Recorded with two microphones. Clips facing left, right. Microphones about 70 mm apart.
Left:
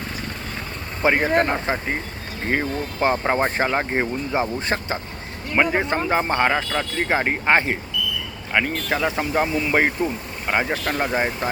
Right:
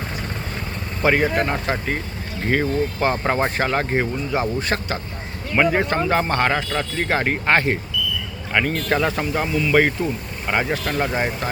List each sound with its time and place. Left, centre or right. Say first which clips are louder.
1.0 s speech: even; centre
5.5 s speech: right 2 dB; centre
9.3 s speech: left 1 dB; left
9.7 s speech: right 3 dB; centre
10.4 s speech: even; centre